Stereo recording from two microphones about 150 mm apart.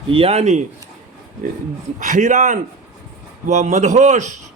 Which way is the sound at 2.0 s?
60° right (ahead or behind).